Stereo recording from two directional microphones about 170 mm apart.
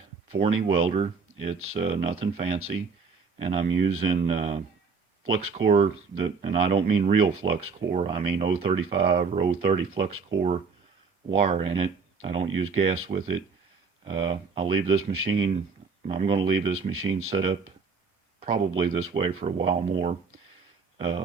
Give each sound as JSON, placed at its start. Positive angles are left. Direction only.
{"t": 0.3, "sound": "speech", "side_deg": -35}
{"t": 11.3, "sound": "speech", "side_deg": -35}